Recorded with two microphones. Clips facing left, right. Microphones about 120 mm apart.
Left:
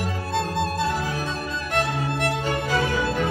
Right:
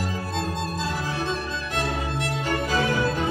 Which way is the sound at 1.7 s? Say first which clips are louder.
Left 3 dB; 60° left (ahead or behind).